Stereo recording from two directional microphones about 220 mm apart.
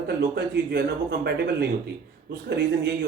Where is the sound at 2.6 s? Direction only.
50° right (ahead or behind).